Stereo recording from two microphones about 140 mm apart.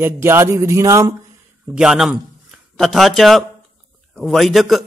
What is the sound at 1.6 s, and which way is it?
A man's voice, 5° right (ahead or behind).